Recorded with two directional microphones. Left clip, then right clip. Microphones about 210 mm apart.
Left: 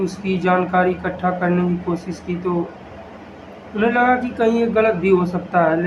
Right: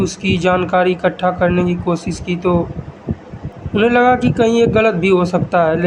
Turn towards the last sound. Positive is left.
turn(degrees=-40)  # may be behind; listen again after turning